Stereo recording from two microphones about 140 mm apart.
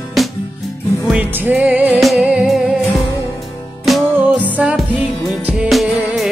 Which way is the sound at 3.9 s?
Centre (ahead or behind).